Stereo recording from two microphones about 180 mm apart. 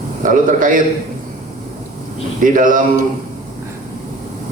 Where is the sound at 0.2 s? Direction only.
50° right (ahead or behind).